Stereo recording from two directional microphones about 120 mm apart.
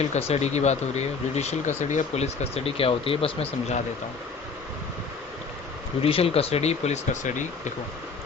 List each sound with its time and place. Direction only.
0.1 s speech: 65° left (ahead or behind)
6.0 s speech: 50° left (ahead or behind); by 7.7 s 90° left